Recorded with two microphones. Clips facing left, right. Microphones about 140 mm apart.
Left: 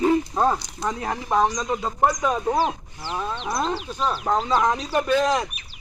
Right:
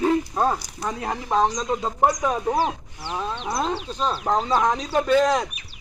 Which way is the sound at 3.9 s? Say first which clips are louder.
Even; 20° right (ahead or behind).